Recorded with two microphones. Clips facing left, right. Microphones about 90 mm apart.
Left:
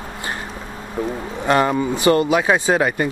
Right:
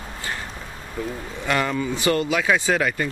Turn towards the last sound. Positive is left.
turn(degrees=30)  # may be behind; listen again after turning